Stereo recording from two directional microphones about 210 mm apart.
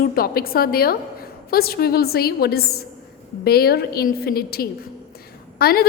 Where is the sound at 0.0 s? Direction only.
45° left (ahead or behind).